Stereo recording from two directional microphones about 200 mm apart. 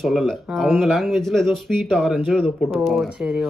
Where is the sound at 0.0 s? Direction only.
Centre (ahead or behind).